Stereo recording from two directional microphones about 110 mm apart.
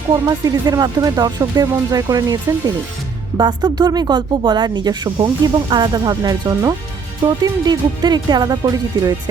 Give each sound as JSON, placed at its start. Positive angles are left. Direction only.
{"t": 0.3, "sound": "speech", "side_deg": -35}